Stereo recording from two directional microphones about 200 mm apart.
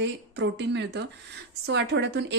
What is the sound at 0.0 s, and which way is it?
A woman's voice, 60° right (ahead or behind).